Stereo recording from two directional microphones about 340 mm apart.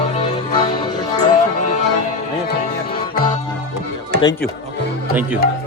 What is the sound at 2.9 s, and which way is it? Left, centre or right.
Music, centre.